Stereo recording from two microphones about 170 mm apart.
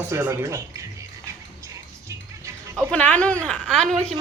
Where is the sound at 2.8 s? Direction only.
5° left (ahead or behind).